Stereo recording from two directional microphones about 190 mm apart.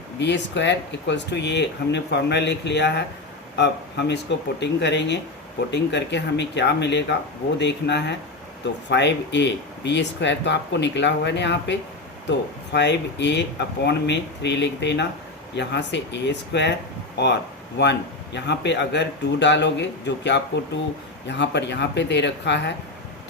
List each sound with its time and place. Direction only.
0.2 s speech: 65° left (ahead or behind)
17.8 s speech: 65° left (ahead or behind)